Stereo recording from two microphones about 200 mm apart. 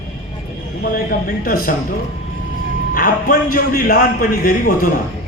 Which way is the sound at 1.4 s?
45° left (ahead or behind).